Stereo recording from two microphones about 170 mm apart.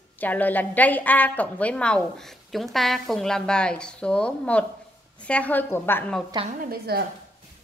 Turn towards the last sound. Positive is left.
turn(degrees=-60)  # may be behind; listen again after turning